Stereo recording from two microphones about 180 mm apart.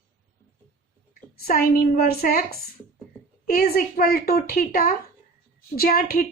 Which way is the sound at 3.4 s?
55° left (ahead or behind).